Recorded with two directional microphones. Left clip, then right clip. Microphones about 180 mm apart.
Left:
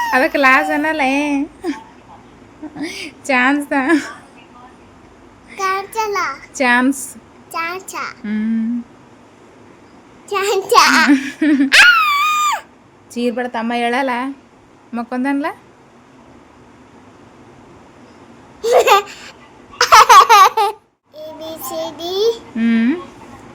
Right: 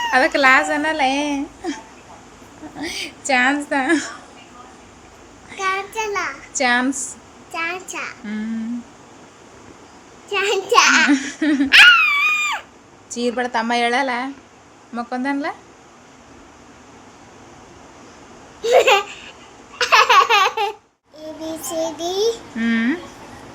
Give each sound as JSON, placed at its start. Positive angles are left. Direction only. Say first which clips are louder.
{"t": 0.0, "sound": "a child's voice", "louder": "left 2 dB", "side_deg": 35}
{"t": 5.5, "sound": "a child's voice", "louder": "left 3 dB", "side_deg": 20}
{"t": 6.5, "sound": "a woman's voice", "louder": "left 4 dB", "side_deg": 45}
{"t": 7.5, "sound": "a child's voice", "louder": "left 2 dB", "side_deg": 25}
{"t": 8.2, "sound": "a child's voice", "louder": "left 6 dB", "side_deg": 40}
{"t": 10.2, "sound": "a child's voice", "louder": "left 3 dB", "side_deg": 25}
{"t": 11.1, "sound": "a sound", "louder": "left 4 dB", "side_deg": 40}
{"t": 13.1, "sound": "a child's voice", "louder": "left 2 dB", "side_deg": 35}
{"t": 18.6, "sound": "laughter", "louder": "left 3 dB", "side_deg": 25}
{"t": 19.8, "sound": "baby laughter", "louder": "left 6 dB", "side_deg": 25}
{"t": 21.4, "sound": "child singing", "louder": "right 1 dB", "side_deg": 15}
{"t": 22.5, "sound": "a sound", "louder": "left 3 dB", "side_deg": 30}